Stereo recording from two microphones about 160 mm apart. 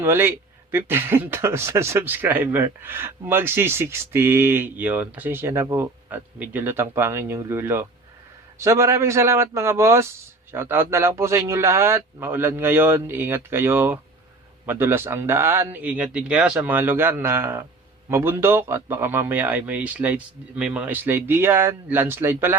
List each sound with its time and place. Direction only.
0.0 s speech: 15° right (ahead or behind)